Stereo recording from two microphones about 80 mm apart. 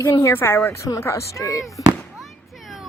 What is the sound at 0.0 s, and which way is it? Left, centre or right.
A child's voice, left.